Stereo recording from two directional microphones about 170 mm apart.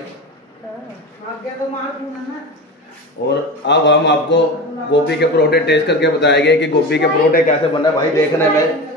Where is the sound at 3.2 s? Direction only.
90° left.